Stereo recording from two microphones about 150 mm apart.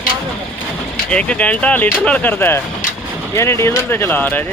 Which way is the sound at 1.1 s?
10° left (ahead or behind).